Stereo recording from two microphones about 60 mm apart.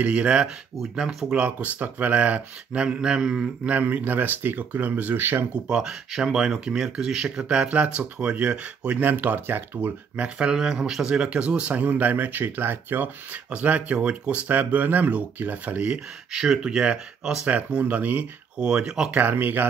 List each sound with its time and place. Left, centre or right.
0.0 s speech: centre
3.6 s speech: right
5.5 s speech: centre
9.1 s speech: right
10.1 s speech: centre
16.3 s speech: centre; by 18.2 s right
18.6 s speech: centre
19.1 s speech: right